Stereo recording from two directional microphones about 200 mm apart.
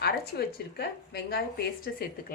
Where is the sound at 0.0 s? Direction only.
50° left (ahead or behind).